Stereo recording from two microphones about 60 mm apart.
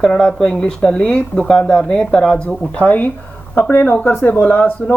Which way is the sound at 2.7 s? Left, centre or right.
Left.